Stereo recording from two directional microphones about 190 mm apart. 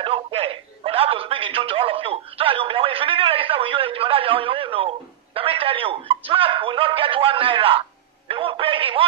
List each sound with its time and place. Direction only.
0.0 s telephone: 30° right (ahead or behind)